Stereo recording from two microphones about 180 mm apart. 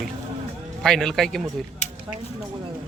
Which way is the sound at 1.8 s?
40° left (ahead or behind).